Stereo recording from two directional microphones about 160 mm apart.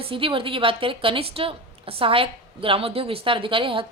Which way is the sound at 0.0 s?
35° right (ahead or behind).